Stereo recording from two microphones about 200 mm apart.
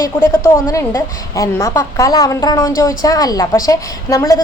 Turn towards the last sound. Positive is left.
turn(degrees=15)  # may be behind; listen again after turning